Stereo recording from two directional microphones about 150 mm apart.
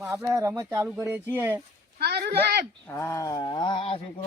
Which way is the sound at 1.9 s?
90° right.